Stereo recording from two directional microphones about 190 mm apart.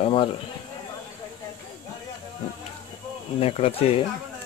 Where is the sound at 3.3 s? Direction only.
30° left (ahead or behind).